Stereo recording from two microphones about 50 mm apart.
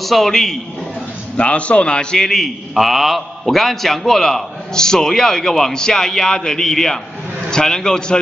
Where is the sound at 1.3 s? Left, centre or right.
Left.